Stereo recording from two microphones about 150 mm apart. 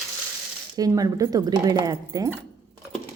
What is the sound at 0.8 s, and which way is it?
A woman's voice, 25° right (ahead or behind).